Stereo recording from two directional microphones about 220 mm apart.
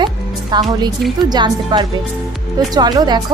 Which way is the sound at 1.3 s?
20° right (ahead or behind).